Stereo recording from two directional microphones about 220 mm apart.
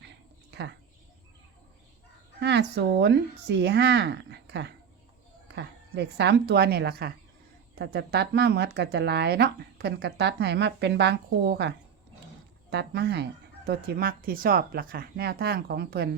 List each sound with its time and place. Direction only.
0.5 s speech: 50° right (ahead or behind)
2.4 s speech: 50° right (ahead or behind)
12.7 s speech: 50° right (ahead or behind)